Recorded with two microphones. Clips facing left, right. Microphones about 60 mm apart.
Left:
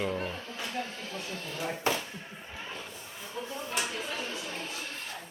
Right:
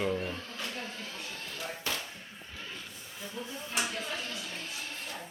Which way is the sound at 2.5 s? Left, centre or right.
Left.